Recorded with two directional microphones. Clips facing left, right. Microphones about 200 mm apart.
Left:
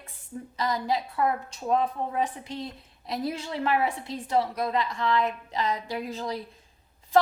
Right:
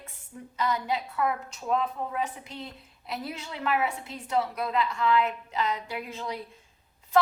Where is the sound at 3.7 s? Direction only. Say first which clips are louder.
Left 1 dB; 30° left (ahead or behind).